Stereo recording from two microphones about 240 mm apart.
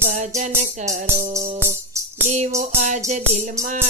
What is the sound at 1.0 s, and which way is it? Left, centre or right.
Music, centre.